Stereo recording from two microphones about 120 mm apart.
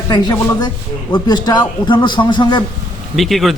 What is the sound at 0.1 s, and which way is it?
Speech, 35° left (ahead or behind).